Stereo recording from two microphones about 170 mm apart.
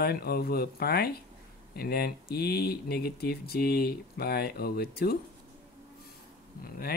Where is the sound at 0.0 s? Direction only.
65° left (ahead or behind).